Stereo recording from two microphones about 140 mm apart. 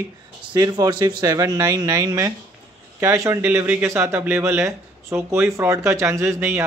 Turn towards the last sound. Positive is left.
turn(degrees=-15)  # may be behind; listen again after turning